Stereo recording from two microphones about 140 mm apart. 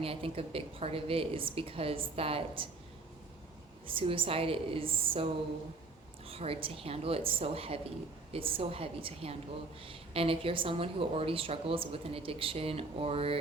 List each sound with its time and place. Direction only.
0.0 s speech: 40° right (ahead or behind)
3.8 s a woman's voice: 40° right (ahead or behind)